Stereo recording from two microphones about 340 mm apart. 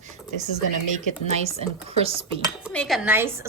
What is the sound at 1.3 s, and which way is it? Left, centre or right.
Speech, centre.